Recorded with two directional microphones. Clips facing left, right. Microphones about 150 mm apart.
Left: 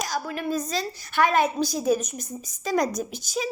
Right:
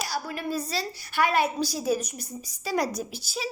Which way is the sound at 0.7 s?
10° right (ahead or behind).